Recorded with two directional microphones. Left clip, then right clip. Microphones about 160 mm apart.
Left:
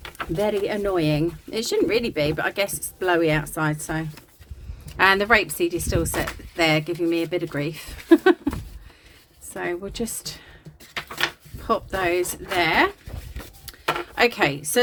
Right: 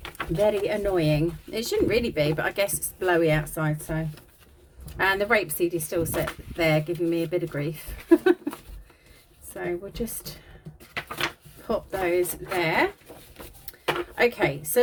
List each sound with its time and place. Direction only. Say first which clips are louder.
0.3 s speech: even; 35° left (ahead or behind)
4.9 s a woman's voice: left 5 dB; 25° left (ahead or behind)
11.7 s speech: left 3 dB; 30° left (ahead or behind)
14.2 s speech: left 3 dB; 35° left (ahead or behind)